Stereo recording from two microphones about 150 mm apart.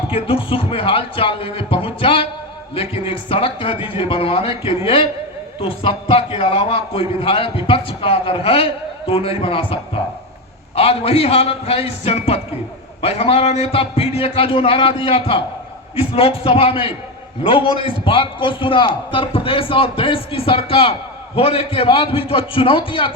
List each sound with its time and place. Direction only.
0.1 s a man's voice: 40° left (ahead or behind)